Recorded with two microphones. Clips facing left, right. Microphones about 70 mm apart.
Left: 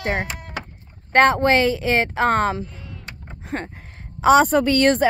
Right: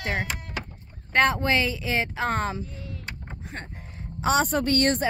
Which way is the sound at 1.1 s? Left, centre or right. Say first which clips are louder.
Left 7 dB; left.